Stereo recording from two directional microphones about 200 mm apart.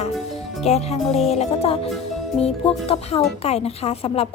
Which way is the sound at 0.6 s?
30° left (ahead or behind).